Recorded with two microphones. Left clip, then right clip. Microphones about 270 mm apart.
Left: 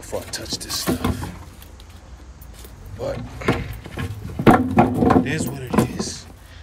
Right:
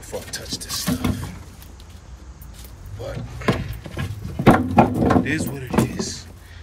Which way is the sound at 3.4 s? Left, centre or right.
Centre.